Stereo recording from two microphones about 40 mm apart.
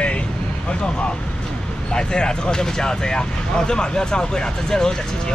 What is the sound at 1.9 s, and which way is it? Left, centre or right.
Speech, left.